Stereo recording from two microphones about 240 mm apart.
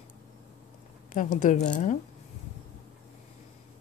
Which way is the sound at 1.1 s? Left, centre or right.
Left.